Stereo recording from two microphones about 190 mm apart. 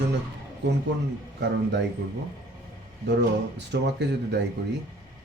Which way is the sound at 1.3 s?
65° right (ahead or behind).